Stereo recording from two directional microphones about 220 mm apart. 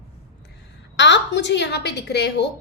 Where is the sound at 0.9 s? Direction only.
55° left (ahead or behind).